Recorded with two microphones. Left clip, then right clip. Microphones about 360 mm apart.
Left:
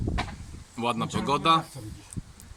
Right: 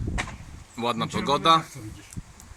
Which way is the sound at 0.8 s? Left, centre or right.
Centre.